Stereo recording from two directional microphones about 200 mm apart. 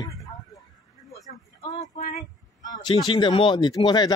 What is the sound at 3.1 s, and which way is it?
Speech, 25° left (ahead or behind).